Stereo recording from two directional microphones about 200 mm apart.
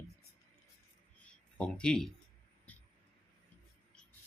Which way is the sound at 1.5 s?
5° left (ahead or behind).